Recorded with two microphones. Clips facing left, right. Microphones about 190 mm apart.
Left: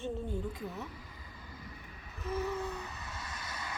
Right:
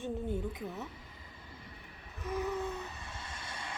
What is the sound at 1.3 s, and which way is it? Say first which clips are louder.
Vehicle: left 3 dB; 30° right (ahead or behind).